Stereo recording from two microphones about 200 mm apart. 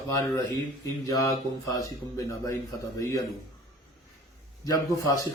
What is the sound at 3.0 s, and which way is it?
Speech, 15° left (ahead or behind).